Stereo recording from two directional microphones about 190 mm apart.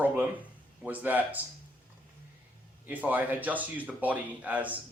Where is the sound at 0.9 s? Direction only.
10° right (ahead or behind).